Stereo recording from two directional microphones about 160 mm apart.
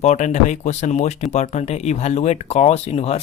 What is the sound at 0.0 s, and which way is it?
Speech, 45° left (ahead or behind).